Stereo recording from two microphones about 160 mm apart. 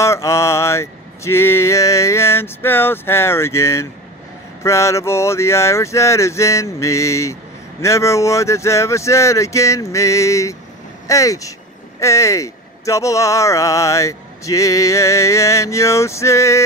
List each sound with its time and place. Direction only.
0.0 s speech: 20° left (ahead or behind)